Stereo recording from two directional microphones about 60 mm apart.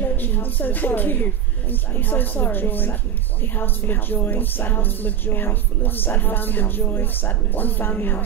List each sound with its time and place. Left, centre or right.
0.0 s a woman's voice: left